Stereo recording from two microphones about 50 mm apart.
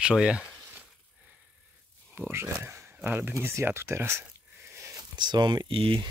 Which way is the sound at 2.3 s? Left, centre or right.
Right.